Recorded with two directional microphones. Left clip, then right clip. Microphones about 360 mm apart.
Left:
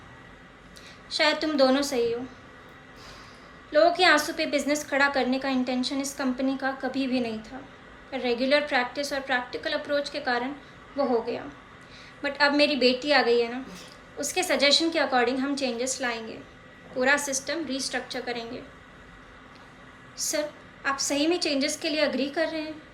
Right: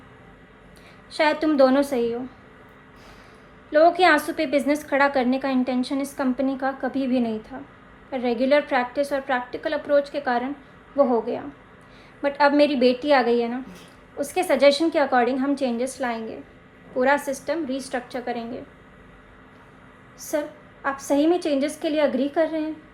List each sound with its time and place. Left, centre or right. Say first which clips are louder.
1.1 s a woman's voice: right 4 dB; centre
3.7 s a woman's voice: right 3 dB; centre
20.2 s a woman's voice: right 2 dB; centre